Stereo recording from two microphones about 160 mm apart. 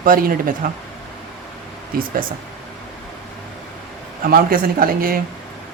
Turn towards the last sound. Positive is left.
turn(degrees=-65)  # may be behind; listen again after turning